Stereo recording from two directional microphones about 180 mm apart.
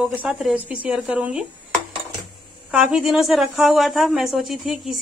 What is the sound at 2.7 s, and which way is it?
Speech, centre (ahead or behind).